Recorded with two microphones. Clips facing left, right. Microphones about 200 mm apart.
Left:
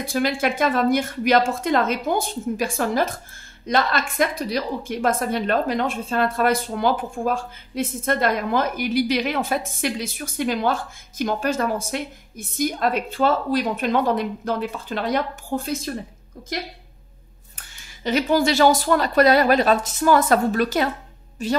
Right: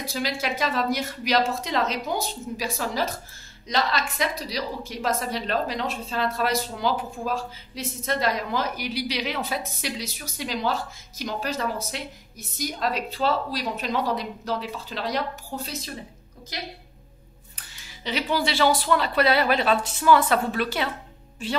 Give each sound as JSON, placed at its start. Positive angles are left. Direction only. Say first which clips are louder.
{"t": 0.0, "sound": "a woman's voice", "louder": "left 7 dB", "side_deg": 50}
{"t": 17.6, "sound": "a woman's voice", "louder": "even", "side_deg": 50}